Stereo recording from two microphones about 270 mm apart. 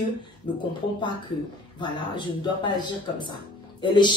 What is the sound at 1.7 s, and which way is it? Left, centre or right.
Speech, centre.